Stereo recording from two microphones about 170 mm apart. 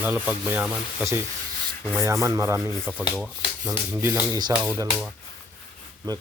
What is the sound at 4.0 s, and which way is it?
Speech, 20° right (ahead or behind).